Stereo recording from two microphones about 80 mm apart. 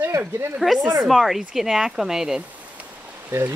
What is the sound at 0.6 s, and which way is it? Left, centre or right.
Speech, centre.